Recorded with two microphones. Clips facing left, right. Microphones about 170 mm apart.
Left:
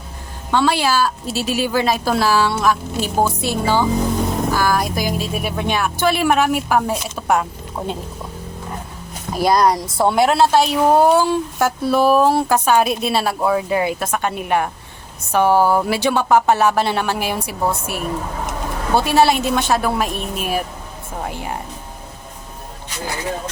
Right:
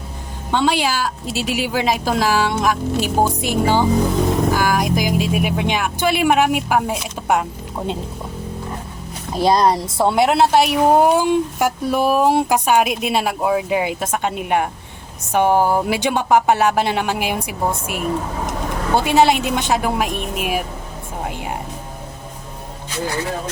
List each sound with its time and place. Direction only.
0.5 s a woman's voice: 15° right (ahead or behind)
9.3 s a woman's voice: 25° right (ahead or behind)